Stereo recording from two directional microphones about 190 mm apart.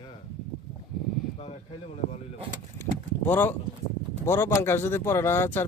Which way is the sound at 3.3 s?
10° left (ahead or behind).